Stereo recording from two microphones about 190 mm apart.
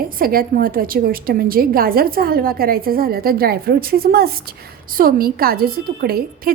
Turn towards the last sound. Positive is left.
turn(degrees=-55)  # may be behind; listen again after turning